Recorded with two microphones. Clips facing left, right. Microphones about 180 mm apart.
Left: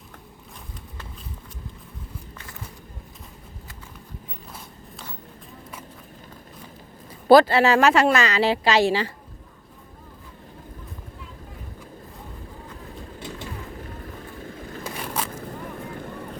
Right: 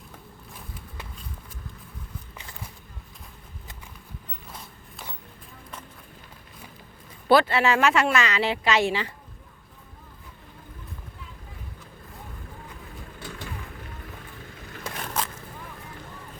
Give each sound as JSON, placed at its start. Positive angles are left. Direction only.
{"t": 7.3, "sound": "speech", "side_deg": 40}
{"t": 13.1, "sound": "vehicle", "side_deg": 25}
{"t": 14.8, "sound": "biting", "side_deg": 5}